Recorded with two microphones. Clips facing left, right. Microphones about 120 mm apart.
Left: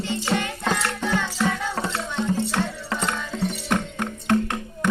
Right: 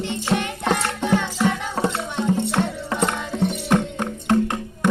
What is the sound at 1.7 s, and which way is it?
Music, 20° right (ahead or behind).